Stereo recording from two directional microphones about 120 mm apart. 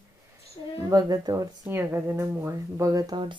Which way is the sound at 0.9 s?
30° right (ahead or behind).